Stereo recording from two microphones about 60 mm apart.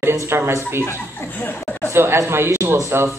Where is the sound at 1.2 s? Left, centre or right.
Left.